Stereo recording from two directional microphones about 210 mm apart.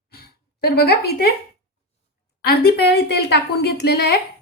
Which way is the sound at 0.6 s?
50° left (ahead or behind).